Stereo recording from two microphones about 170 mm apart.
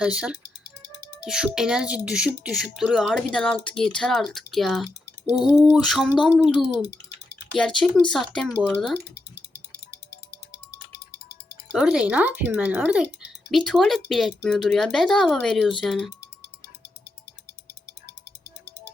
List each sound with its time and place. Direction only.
0.0 s speech: 5° right (ahead or behind)
6.8 s a sound: 85° left
7.5 s speech: 5° left (ahead or behind)
9.1 s music: 85° left
11.7 s speech: 5° right (ahead or behind)
17.8 s music: 90° left